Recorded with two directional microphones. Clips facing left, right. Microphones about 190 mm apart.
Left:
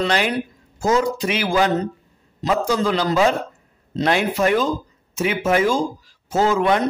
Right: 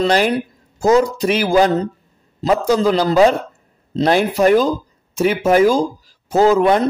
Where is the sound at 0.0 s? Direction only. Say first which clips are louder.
Right 5 dB; 40° right (ahead or behind).